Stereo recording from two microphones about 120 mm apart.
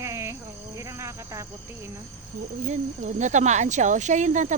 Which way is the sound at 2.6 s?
85° right.